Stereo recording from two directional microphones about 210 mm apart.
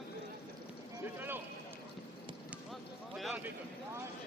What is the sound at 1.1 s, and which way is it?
Boat, 10° right (ahead or behind).